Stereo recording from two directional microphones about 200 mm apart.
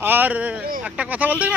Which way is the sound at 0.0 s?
10° right (ahead or behind).